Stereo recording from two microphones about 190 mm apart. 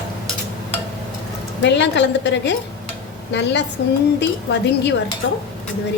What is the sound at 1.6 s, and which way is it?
A woman's voice, 65° left (ahead or behind).